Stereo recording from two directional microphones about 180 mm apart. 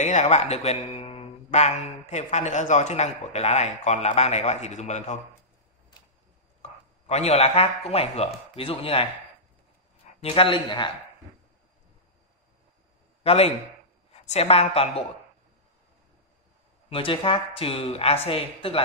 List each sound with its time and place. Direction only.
0.0 s speech: 40° left (ahead or behind)
6.6 s speech: 35° left (ahead or behind)
10.2 s a man's voice: 30° left (ahead or behind)
13.2 s a man's voice: 35° left (ahead or behind)
16.9 s speech: 30° left (ahead or behind)